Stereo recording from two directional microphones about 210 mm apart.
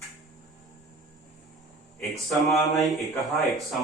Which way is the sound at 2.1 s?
Centre (ahead or behind).